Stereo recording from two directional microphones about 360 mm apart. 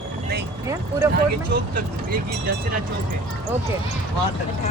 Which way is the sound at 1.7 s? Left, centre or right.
Right.